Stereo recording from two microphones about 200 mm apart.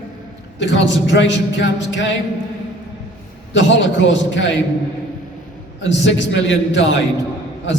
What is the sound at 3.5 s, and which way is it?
A man's voice, 65° left (ahead or behind).